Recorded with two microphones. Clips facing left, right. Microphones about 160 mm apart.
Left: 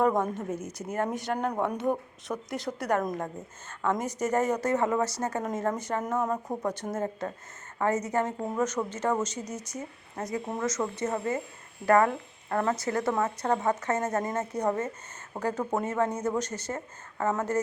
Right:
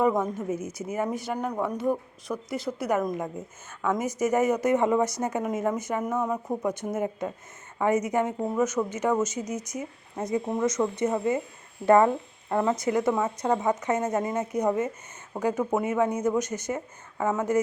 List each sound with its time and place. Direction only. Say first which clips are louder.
0.0 s speech: right 1 dB; 5° right (ahead or behind)
10.2 s speech: right 5 dB; 20° right (ahead or behind)